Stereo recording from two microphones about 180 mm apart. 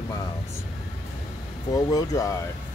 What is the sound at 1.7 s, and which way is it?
Speech, 20° left (ahead or behind).